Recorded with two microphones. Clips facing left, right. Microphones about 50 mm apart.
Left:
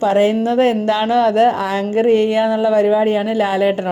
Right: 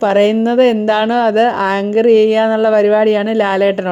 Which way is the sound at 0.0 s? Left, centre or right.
Right.